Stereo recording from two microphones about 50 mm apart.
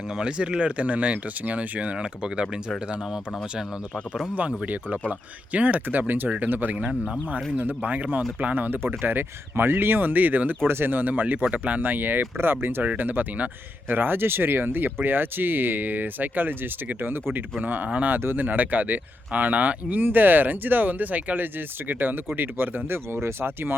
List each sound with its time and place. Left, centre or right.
0.2 s speech: centre
4.4 s speech: right
6.7 s speech: right
7.6 s speech: right
10.7 s speech: right
12.8 s speech: right